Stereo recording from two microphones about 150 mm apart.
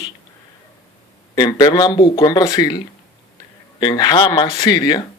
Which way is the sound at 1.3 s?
25° left (ahead or behind).